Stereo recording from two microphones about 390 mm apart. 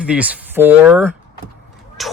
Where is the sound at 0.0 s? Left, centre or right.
Centre.